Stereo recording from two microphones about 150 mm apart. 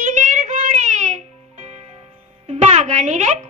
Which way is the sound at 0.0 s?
55° right (ahead or behind).